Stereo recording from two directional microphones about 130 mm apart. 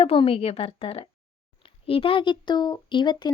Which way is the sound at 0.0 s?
45° left (ahead or behind).